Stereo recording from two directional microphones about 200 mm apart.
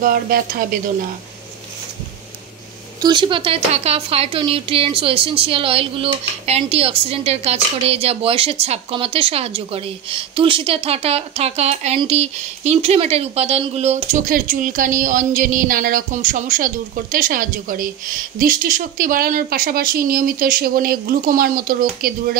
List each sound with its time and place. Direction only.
0.0 s speech: 45° right (ahead or behind)
3.0 s a woman's voice: 20° right (ahead or behind); by 22.4 s 45° right (ahead or behind)